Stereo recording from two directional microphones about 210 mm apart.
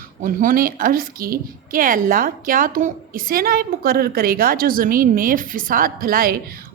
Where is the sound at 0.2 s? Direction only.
40° right (ahead or behind).